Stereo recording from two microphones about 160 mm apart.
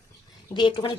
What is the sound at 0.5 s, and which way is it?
Speech, 30° left (ahead or behind).